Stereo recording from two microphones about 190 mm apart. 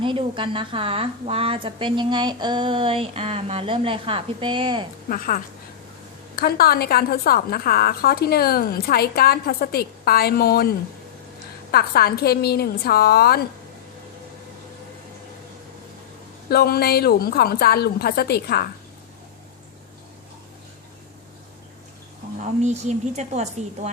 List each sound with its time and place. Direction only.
0.0 s a woman's voice: 25° right (ahead or behind)
5.0 s a woman's voice: 50° left (ahead or behind)
16.5 s a woman's voice: 55° left (ahead or behind)
22.4 s a woman's voice: 35° right (ahead or behind)